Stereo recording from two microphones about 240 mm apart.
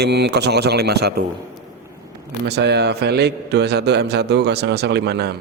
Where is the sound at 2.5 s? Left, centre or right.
Right.